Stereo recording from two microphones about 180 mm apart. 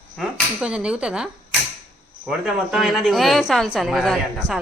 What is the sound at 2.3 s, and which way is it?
A woman's voice, centre (ahead or behind).